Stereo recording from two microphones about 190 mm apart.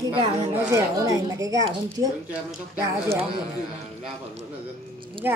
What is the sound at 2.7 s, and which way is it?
Speech, 15° right (ahead or behind).